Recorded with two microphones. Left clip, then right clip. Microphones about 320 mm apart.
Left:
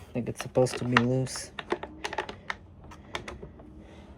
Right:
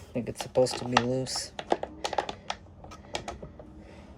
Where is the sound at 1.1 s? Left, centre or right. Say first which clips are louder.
Right 1 dB; left.